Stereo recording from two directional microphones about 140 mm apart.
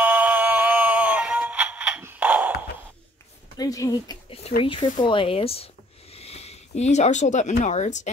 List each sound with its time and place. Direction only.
0.0 s music: 10° right (ahead or behind)
3.5 s speech: 25° left (ahead or behind)
4.3 s speech: 45° left (ahead or behind)